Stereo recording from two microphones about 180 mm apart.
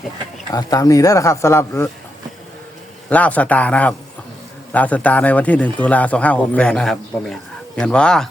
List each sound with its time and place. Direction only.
0.5 s speech: 20° left (ahead or behind)
3.1 s speech: 10° left (ahead or behind)